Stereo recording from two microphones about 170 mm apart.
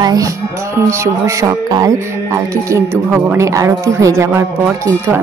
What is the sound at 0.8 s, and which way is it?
Speech, 15° right (ahead or behind).